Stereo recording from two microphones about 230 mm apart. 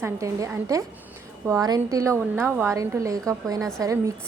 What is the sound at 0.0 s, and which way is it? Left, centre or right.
A woman's voice, centre.